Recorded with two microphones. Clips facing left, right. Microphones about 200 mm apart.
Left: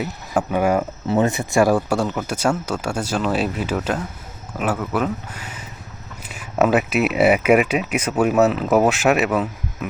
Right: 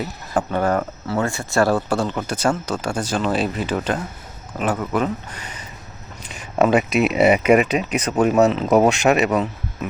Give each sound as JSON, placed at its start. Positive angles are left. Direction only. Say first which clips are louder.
{"t": 0.0, "sound": "speech", "louder": "left 1 dB", "side_deg": 10}